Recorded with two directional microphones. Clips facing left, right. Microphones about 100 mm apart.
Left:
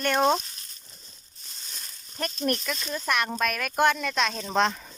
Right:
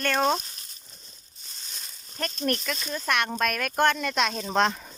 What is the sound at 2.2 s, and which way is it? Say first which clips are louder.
Speech: even; 10° left (ahead or behind).